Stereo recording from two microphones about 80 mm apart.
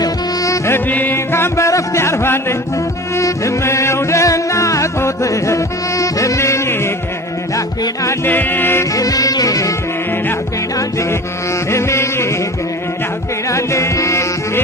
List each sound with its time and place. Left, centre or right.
0.0 s music: left
0.7 s music: left
8.3 s music: left
8.9 s music: left
10.8 s music: left
13.5 s music: left